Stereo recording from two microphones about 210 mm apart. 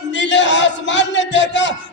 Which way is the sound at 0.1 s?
60° left (ahead or behind).